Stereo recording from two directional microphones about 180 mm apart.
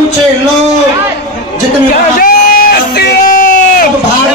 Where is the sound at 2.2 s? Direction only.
55° left (ahead or behind).